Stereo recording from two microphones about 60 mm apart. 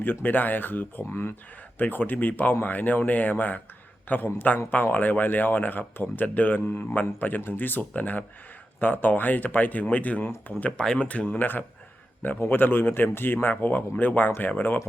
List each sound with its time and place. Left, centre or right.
0.0 s speech: left
10.7 s speech: centre; by 14.8 s left